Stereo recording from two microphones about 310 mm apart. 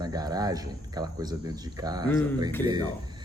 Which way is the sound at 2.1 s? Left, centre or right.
Centre.